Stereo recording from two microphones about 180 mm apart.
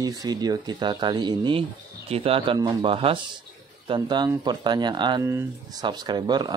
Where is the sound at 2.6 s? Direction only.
20° right (ahead or behind).